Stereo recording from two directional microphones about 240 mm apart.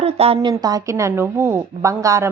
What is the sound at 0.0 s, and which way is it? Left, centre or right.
A woman's voice, right.